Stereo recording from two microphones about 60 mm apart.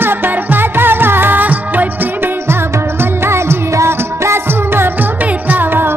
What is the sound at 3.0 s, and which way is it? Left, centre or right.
Music, right.